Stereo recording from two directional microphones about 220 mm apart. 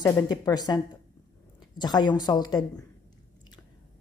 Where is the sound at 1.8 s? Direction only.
20° left (ahead or behind).